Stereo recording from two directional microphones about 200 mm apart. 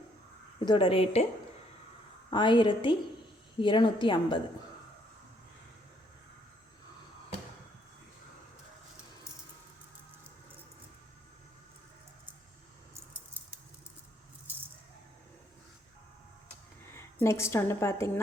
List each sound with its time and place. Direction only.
0.6 s a woman's voice: 25° left (ahead or behind)
2.3 s a woman's voice: 25° left (ahead or behind)
16.9 s a woman's voice: 15° left (ahead or behind)